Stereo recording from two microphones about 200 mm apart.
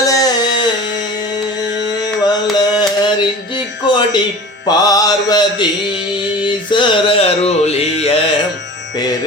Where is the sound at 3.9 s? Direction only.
20° left (ahead or behind).